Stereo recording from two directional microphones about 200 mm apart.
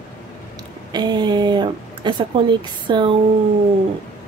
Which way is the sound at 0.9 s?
20° right (ahead or behind).